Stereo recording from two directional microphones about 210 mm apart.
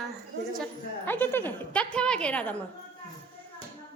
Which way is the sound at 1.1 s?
10° left (ahead or behind).